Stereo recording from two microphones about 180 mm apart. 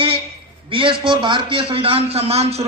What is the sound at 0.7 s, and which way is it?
A man's voice, 30° right (ahead or behind).